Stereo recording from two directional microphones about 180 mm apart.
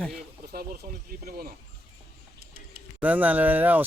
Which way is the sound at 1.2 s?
55° right (ahead or behind).